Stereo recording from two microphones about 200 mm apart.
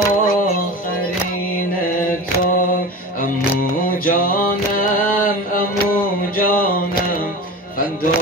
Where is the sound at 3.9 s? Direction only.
45° left (ahead or behind).